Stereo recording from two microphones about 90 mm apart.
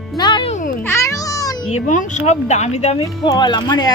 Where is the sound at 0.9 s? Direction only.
35° left (ahead or behind).